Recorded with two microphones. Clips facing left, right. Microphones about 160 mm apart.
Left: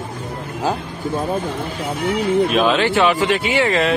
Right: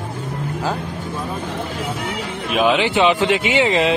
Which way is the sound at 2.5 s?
15° right (ahead or behind).